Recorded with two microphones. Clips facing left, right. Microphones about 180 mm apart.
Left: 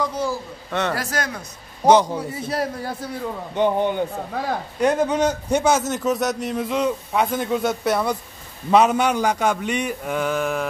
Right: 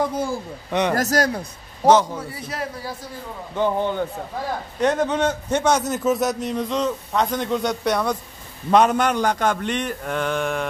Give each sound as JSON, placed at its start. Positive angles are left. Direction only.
{"t": 0.0, "sound": "speech", "side_deg": -55}
{"t": 0.7, "sound": "a man's voice", "side_deg": -15}
{"t": 0.9, "sound": "speech", "side_deg": -40}
{"t": 1.9, "sound": "a man's voice", "side_deg": 15}
{"t": 3.5, "sound": "a man's voice", "side_deg": 20}